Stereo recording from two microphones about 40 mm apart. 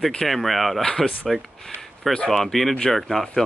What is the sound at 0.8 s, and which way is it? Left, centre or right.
Speech, centre.